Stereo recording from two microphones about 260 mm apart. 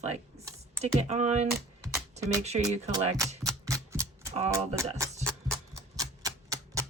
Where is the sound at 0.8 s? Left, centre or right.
Right.